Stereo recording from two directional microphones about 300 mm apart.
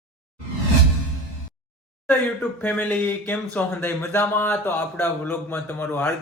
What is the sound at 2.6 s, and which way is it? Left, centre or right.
Speech, centre.